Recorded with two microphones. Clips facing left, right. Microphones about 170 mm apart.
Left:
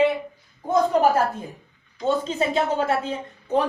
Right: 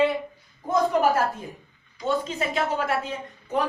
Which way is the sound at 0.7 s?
30° left (ahead or behind).